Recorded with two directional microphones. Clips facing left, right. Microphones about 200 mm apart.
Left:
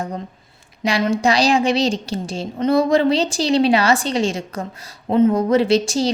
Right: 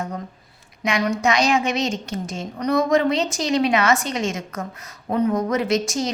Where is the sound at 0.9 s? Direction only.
30° left (ahead or behind).